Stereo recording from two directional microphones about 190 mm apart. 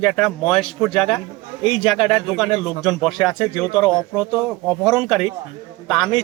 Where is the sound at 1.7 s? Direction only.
Centre (ahead or behind).